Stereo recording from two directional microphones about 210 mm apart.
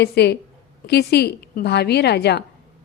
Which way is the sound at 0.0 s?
50° left (ahead or behind).